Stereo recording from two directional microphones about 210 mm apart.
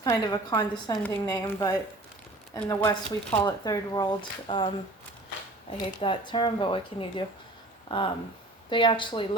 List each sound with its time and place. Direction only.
0.0 s a woman's voice: 15° left (ahead or behind)
5.7 s speech: 20° left (ahead or behind)